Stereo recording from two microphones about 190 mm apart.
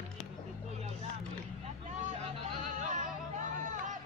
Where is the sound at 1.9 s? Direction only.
40° right (ahead or behind).